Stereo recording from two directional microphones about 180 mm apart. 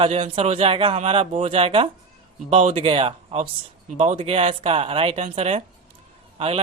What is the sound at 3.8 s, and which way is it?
Speech, 40° right (ahead or behind).